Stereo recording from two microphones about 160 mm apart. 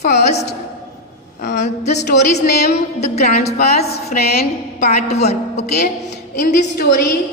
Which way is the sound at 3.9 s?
75° left (ahead or behind).